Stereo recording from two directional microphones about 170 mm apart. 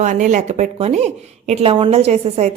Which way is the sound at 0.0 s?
45° right (ahead or behind).